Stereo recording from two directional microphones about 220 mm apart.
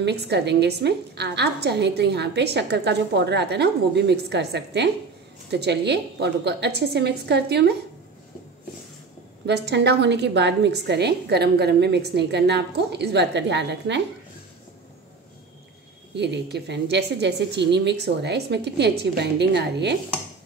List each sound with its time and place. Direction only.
0.0 s a woman's voice: 50° right (ahead or behind)
9.5 s a woman's voice: 50° right (ahead or behind)
16.2 s a woman's voice: 50° right (ahead or behind)